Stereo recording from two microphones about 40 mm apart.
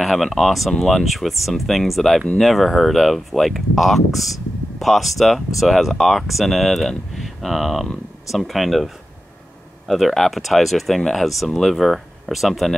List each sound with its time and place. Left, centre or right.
0.0 s speech: centre